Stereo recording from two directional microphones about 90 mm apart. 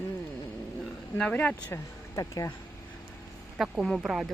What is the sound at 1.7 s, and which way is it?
Speech, 35° left (ahead or behind).